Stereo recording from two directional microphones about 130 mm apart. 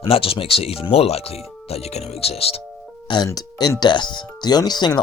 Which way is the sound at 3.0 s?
30° left (ahead or behind).